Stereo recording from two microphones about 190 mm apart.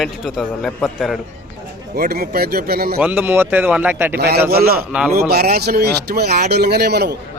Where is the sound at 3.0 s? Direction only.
10° right (ahead or behind).